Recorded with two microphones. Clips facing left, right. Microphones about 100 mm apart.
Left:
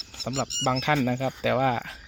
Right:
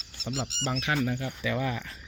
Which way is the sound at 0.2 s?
90° left.